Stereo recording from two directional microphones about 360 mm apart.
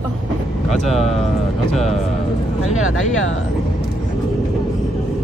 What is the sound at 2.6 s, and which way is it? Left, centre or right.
Speech, left.